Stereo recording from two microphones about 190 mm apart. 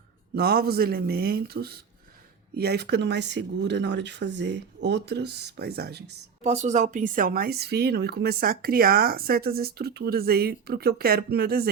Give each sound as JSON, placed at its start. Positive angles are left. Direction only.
{"t": 0.3, "sound": "speech", "side_deg": -55}
{"t": 6.4, "sound": "speech", "side_deg": -35}